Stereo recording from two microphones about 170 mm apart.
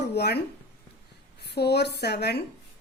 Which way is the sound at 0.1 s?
75° left (ahead or behind).